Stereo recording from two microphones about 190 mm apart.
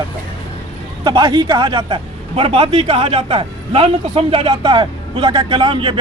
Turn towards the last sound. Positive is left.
turn(degrees=-25)  # may be behind; listen again after turning